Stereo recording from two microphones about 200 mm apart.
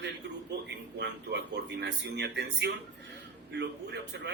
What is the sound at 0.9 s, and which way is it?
A man's voice, 60° right (ahead or behind).